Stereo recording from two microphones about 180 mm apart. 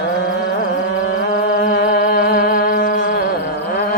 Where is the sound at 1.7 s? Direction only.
60° left (ahead or behind).